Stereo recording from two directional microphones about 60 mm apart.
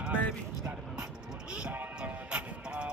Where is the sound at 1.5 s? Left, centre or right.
Centre.